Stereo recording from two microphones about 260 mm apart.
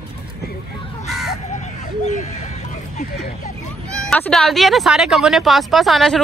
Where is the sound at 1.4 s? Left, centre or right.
Left.